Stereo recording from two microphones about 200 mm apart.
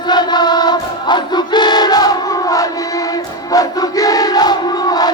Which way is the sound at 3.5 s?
20° left (ahead or behind).